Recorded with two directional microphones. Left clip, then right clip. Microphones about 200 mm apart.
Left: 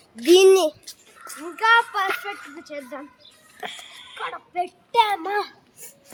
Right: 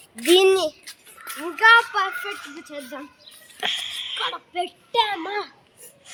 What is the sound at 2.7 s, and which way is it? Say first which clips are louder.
Speech: left 2 dB; 20° right (ahead or behind).